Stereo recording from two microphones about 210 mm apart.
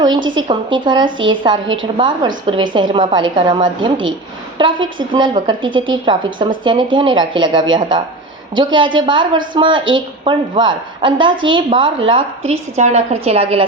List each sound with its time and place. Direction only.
0.0 s a woman's voice: 20° right (ahead or behind)
1.6 s a woman's voice: 65° right (ahead or behind)
2.0 s a woman's voice: 20° right (ahead or behind)